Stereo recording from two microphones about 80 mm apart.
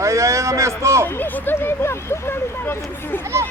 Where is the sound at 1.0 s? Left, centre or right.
Left.